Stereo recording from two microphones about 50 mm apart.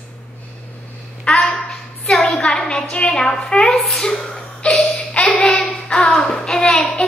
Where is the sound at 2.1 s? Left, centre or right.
Centre.